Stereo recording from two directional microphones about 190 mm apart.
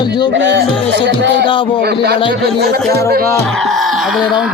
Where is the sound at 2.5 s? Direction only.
55° right (ahead or behind).